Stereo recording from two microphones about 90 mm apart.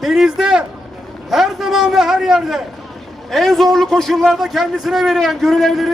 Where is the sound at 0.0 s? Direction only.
Centre (ahead or behind).